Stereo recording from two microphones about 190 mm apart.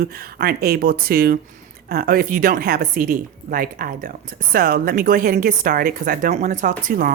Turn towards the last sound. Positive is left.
turn(degrees=-45)  # may be behind; listen again after turning